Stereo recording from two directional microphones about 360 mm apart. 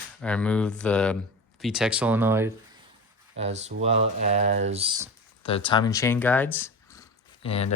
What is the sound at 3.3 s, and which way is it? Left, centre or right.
Speech, centre.